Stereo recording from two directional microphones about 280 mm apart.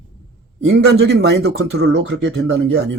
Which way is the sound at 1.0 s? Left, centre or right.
Right.